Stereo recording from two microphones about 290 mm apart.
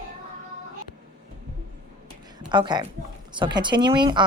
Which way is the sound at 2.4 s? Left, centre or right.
Centre.